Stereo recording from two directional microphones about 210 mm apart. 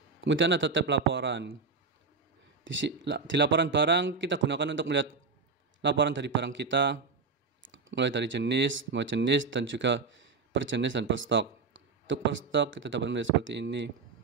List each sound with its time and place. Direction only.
0.2 s speech: 60° right (ahead or behind)
2.6 s speech: 60° right (ahead or behind)